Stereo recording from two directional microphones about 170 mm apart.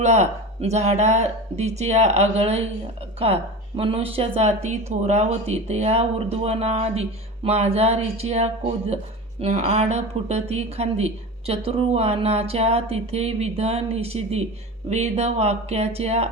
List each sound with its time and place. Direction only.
0.0 s speech: 40° right (ahead or behind)